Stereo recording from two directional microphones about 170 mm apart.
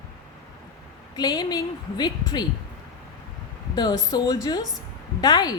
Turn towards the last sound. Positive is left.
turn(degrees=25)  # may be behind; listen again after turning